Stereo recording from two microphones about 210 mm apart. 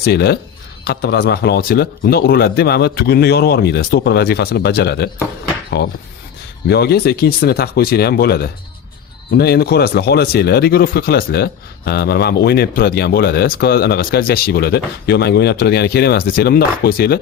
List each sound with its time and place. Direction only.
0.0 s speech: 50° left (ahead or behind)